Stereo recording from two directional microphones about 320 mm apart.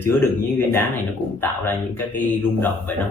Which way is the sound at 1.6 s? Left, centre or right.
Centre.